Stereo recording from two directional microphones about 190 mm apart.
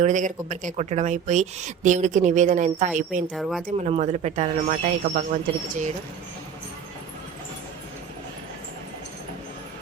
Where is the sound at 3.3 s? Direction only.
Centre (ahead or behind).